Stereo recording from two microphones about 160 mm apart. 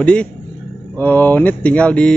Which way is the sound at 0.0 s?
5° left (ahead or behind).